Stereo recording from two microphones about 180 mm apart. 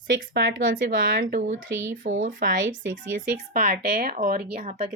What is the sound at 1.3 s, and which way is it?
Speech, 40° right (ahead or behind).